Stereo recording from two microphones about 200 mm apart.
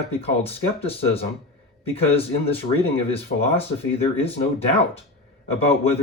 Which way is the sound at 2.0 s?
30° left (ahead or behind).